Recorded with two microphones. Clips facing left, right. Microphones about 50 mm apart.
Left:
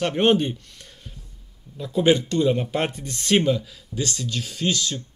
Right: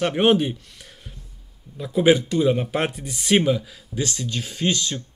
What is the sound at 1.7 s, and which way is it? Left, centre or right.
Speech, centre.